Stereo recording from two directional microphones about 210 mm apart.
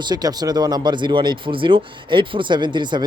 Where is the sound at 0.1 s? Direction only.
20° right (ahead or behind).